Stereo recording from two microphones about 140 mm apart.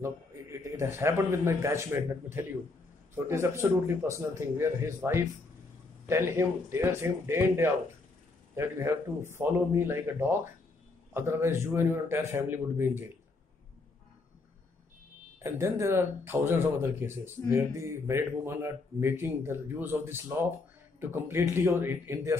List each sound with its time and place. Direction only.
0.0 s a man's voice: 20° right (ahead or behind)
15.3 s speech: 20° right (ahead or behind)